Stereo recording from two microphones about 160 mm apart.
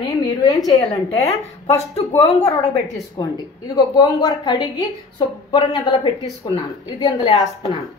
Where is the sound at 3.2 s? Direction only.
25° left (ahead or behind).